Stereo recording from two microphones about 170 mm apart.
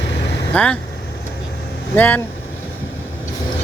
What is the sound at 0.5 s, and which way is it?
Speech, 5° left (ahead or behind).